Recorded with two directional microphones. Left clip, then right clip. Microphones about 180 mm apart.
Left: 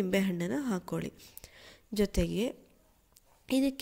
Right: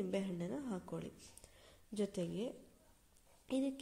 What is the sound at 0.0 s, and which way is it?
A woman's voice, 30° left (ahead or behind).